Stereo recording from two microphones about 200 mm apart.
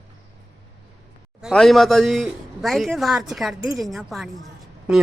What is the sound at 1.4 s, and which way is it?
A man's voice, centre (ahead or behind).